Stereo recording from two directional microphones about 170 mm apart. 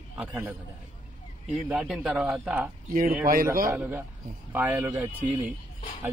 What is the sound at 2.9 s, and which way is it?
Speech, 60° right (ahead or behind).